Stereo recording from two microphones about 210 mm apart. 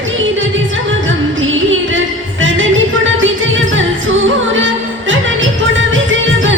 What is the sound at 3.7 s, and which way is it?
Music, 65° right (ahead or behind).